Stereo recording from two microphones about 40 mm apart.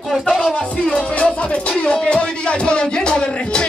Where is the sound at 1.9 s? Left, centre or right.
Left.